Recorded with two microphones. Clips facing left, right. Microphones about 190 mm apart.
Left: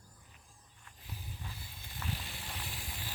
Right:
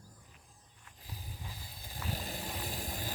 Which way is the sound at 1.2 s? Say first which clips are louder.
Even; 40° right (ahead or behind).